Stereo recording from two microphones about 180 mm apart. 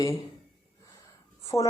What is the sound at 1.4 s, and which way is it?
Speech, 20° left (ahead or behind).